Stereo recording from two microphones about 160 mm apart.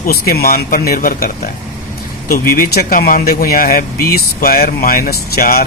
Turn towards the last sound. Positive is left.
turn(degrees=70)  # may be behind; listen again after turning